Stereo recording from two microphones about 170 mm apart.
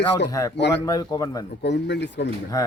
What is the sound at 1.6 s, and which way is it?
Speech, 90° left.